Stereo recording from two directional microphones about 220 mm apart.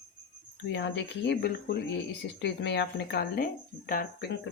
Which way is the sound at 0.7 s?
55° left (ahead or behind).